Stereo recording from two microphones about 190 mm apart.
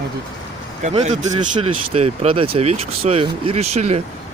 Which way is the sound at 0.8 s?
40° right (ahead or behind).